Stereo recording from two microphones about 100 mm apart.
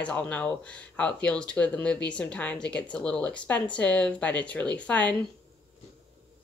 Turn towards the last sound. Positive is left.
turn(degrees=15)  # may be behind; listen again after turning